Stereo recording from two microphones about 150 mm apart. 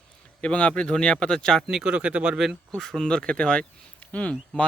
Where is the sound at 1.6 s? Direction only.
5° right (ahead or behind).